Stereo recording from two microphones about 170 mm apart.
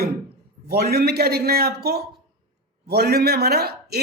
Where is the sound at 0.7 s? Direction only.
65° right (ahead or behind).